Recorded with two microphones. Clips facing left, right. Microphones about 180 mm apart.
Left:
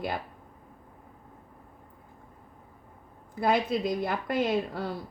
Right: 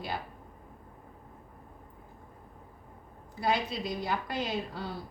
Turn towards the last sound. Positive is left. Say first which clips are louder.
# left 7 dB
turn(degrees=55)  # may be behind; listen again after turning